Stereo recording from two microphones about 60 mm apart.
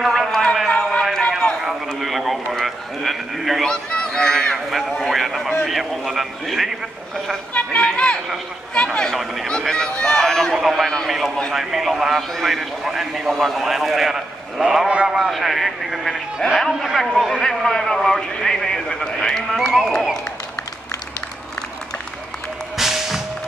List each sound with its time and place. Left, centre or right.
0.1 s a sound: centre
2.0 s a man's voice: centre
3.6 s speech: centre
4.6 s a man's voice: centre
7.5 s a man's voice: centre
9.1 s a man's voice: centre
10.6 s a man's voice: centre
15.1 s a man's voice: centre
22.8 s whip: centre